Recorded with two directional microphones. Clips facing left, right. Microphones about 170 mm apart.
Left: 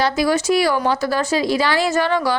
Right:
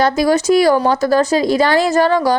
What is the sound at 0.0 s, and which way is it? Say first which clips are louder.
A woman's voice: right 4 dB; 45° right (ahead or behind).